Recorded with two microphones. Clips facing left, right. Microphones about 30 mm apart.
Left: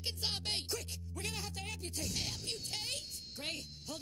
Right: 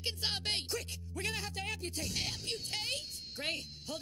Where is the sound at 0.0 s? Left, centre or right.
Right.